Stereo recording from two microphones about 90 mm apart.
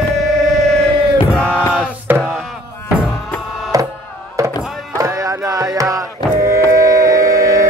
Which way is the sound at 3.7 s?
40° right (ahead or behind).